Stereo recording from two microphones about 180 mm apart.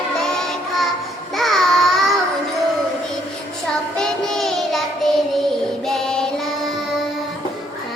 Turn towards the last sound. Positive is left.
turn(degrees=5)  # may be behind; listen again after turning